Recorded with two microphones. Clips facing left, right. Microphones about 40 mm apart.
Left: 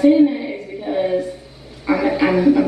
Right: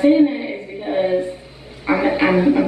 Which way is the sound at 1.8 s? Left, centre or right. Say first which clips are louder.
Even; right.